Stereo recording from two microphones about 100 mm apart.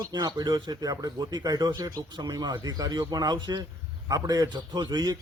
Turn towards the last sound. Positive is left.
turn(degrees=-40)  # may be behind; listen again after turning